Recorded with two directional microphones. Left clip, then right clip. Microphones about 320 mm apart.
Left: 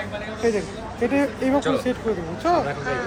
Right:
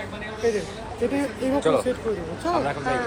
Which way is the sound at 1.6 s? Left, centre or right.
Centre.